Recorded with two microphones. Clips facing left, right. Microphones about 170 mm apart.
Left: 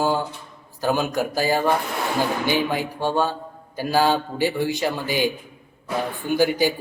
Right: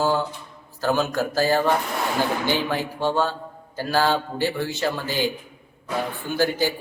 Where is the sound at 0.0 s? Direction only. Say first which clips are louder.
Even; 15° left (ahead or behind).